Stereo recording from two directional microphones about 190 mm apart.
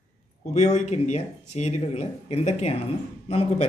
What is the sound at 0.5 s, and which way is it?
Speech, 35° left (ahead or behind).